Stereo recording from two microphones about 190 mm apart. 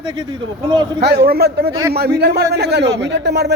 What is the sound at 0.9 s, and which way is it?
A man's voice, 60° right (ahead or behind).